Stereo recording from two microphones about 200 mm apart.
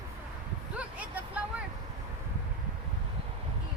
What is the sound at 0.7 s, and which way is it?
Vehicle, 5° right (ahead or behind).